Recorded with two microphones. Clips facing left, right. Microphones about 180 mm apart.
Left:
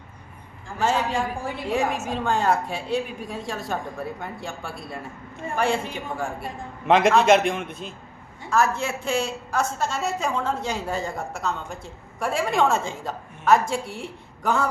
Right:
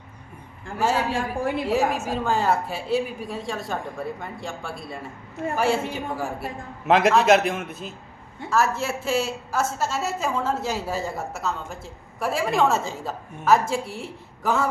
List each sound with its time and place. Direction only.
0.8 s a man's voice: 5° right (ahead or behind)